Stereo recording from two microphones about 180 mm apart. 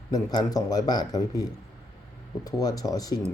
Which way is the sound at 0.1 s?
20° left (ahead or behind).